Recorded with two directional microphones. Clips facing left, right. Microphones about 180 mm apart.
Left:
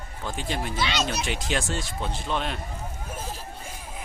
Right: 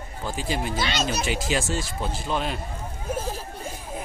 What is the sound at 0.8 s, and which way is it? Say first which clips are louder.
Speech: left 3 dB; 45° right (ahead or behind).